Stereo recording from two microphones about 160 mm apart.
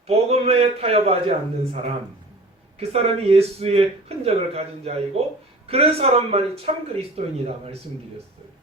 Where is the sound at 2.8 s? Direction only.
40° right (ahead or behind).